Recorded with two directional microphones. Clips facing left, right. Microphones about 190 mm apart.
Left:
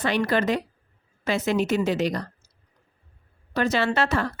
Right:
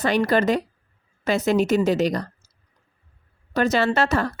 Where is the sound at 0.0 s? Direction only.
40° right (ahead or behind).